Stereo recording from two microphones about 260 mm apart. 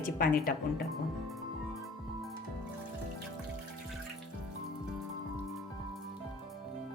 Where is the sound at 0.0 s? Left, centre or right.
Left.